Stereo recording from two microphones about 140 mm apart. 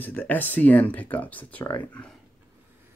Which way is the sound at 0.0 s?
15° left (ahead or behind).